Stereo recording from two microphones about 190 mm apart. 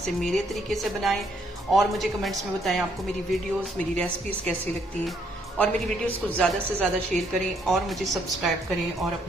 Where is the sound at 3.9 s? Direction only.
5° left (ahead or behind).